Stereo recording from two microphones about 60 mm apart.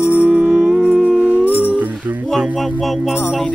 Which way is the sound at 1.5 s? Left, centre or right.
Left.